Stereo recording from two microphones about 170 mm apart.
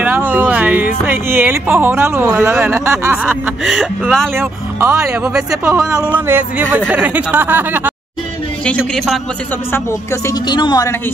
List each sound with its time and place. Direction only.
0.3 s speech: 10° right (ahead or behind)
3.2 s speech: 5° right (ahead or behind)
4.4 s speech: 15° right (ahead or behind)
5.2 s speech: 5° right (ahead or behind)
8.6 s speech: 5° left (ahead or behind)
9.7 s a woman's voice: 15° left (ahead or behind)